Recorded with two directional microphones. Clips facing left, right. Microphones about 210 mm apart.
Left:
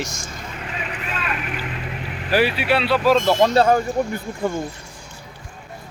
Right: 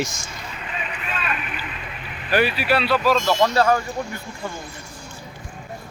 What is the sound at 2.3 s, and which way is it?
Speech, 25° left (ahead or behind).